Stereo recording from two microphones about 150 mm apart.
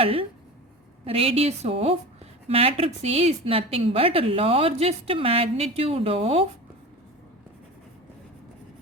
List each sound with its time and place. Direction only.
0.0 s a woman's voice: 40° right (ahead or behind)